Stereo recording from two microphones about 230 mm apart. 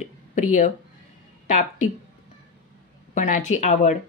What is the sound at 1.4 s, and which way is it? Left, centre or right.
Speech, left.